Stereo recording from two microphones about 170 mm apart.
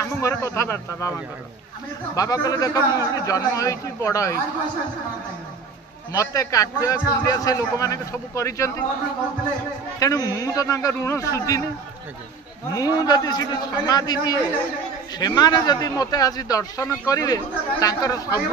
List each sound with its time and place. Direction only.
0.0 s a man's voice: 15° left (ahead or behind)
6.1 s a man's voice: 20° left (ahead or behind)
9.9 s a man's voice: 20° left (ahead or behind)
12.7 s a man's voice: 20° left (ahead or behind)